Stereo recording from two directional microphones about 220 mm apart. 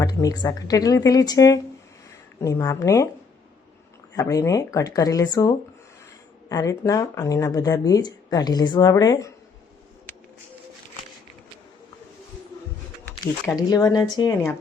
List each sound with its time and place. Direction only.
0.0 s speech: 15° left (ahead or behind)
4.1 s speech: 15° left (ahead or behind)
13.6 s speech: 15° left (ahead or behind)